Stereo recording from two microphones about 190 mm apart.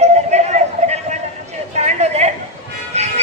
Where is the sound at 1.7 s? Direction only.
35° right (ahead or behind).